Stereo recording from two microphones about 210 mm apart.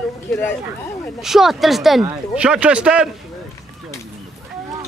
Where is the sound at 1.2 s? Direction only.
Centre (ahead or behind).